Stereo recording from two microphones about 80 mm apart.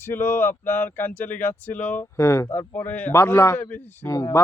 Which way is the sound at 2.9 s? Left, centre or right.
Left.